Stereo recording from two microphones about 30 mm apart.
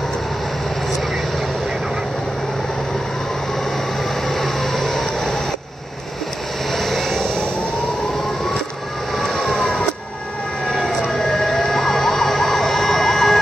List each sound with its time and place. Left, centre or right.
4.3 s vehicle: centre
6.7 s vehicle: centre
9.2 s vehicle: centre
11.1 s emergency vehicle: centre